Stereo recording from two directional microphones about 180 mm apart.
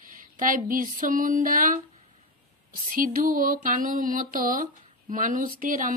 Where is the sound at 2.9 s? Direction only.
50° right (ahead or behind).